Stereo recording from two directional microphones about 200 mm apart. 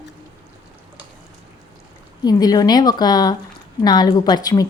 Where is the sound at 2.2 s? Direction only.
20° left (ahead or behind).